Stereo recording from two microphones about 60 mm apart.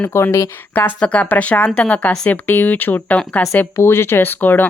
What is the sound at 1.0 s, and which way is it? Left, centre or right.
A woman's voice, left.